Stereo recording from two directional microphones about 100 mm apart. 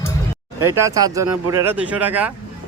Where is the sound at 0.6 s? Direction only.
30° right (ahead or behind).